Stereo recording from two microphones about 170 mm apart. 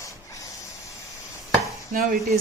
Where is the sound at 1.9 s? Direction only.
55° right (ahead or behind).